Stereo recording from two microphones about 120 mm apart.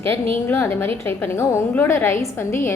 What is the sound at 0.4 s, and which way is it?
A woman's voice, 20° left (ahead or behind).